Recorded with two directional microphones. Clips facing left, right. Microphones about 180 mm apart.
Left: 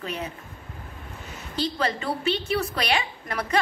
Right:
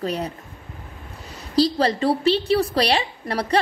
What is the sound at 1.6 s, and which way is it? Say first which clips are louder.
A woman's voice: right 8 dB; 35° right (ahead or behind).